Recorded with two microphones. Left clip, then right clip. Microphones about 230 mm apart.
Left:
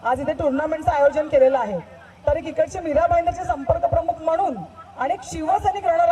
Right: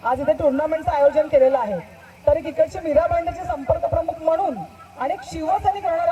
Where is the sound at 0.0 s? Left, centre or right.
Left.